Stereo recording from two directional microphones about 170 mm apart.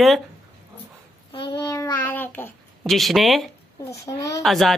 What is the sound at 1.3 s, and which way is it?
Child singing, 25° left (ahead or behind).